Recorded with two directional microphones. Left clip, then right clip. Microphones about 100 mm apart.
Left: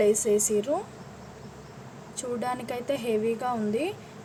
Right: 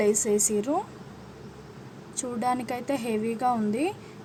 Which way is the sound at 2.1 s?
15° right (ahead or behind).